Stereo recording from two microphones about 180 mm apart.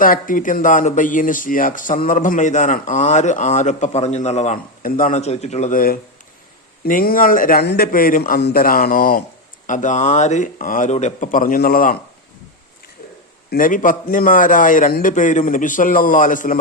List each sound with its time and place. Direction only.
0.0 s speech: 50° left (ahead or behind)
13.5 s speech: 50° left (ahead or behind)